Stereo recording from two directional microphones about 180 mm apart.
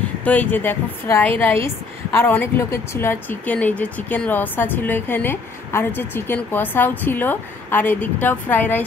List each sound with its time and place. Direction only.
0.2 s speech: 10° left (ahead or behind)